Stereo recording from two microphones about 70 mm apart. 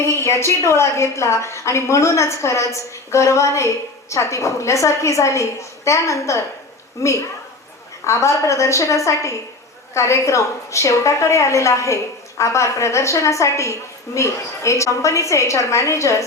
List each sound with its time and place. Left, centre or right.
0.0 s a woman's voice: left